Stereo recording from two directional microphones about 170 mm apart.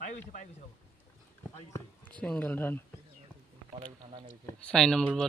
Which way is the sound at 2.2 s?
10° left (ahead or behind).